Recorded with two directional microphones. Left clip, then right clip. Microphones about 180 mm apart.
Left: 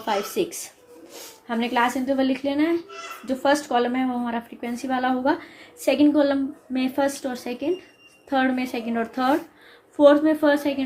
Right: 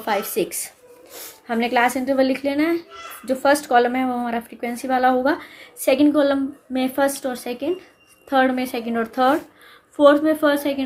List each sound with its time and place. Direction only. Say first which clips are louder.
0.0 s a woman's voice: right 2 dB; 40° right (ahead or behind)